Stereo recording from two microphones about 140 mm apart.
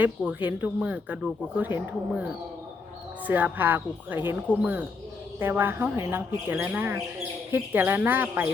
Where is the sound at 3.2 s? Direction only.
10° right (ahead or behind).